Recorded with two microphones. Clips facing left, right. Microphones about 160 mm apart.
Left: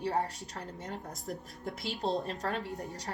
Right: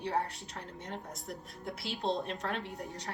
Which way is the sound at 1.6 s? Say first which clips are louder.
Even; 40° left (ahead or behind).